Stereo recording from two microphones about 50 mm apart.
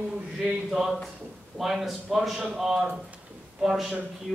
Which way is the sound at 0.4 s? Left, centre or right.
Centre.